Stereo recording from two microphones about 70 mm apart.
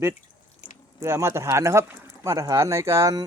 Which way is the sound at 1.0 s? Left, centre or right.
Right.